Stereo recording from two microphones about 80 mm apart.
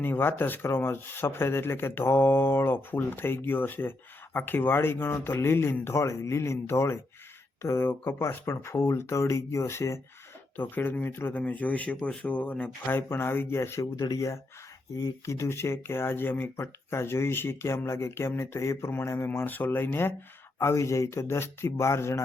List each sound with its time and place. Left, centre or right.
0.0 s speech: left
10.6 s speech: left